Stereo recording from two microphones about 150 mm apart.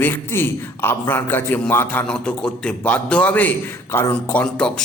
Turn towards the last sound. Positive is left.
turn(degrees=5)  # may be behind; listen again after turning